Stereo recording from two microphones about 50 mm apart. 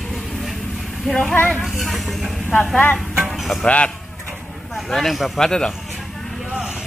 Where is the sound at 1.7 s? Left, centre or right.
Centre.